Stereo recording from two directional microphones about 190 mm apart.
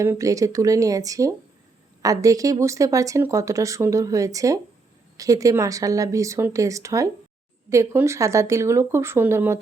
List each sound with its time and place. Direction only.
0.0 s speech: 15° right (ahead or behind)